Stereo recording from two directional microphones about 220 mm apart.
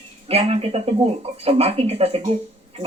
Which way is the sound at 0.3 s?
25° right (ahead or behind).